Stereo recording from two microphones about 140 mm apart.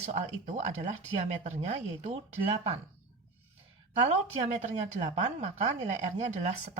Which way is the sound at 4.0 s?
55° right (ahead or behind).